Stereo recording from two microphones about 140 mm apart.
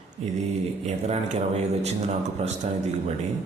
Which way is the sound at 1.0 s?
50° right (ahead or behind).